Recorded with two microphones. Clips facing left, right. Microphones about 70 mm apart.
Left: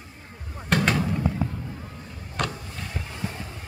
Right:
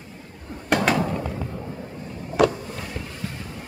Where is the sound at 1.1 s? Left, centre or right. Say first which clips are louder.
Left 1 dB; centre.